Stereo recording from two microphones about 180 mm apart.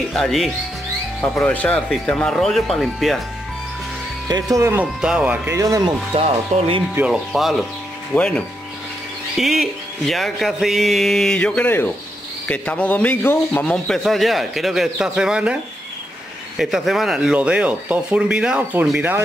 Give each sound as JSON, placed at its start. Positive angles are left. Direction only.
{"t": 0.1, "sound": "speech", "side_deg": 0}
{"t": 4.3, "sound": "speech", "side_deg": -20}
{"t": 6.1, "sound": "speech", "side_deg": -35}
{"t": 7.0, "sound": "speech", "side_deg": -5}